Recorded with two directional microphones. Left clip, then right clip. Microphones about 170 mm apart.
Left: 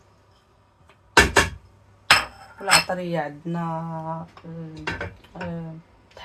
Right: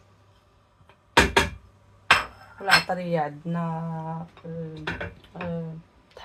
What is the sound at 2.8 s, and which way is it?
Speech, 35° right (ahead or behind).